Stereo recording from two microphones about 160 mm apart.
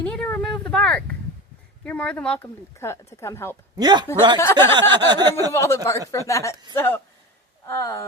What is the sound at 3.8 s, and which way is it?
Speech, 25° right (ahead or behind).